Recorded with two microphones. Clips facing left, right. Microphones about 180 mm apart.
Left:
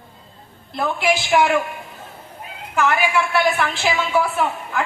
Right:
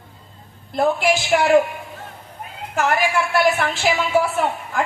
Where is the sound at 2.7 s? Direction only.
45° right (ahead or behind).